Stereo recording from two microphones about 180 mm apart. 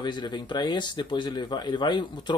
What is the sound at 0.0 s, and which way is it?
Speech, 25° left (ahead or behind).